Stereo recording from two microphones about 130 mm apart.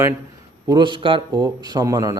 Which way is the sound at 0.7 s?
35° right (ahead or behind).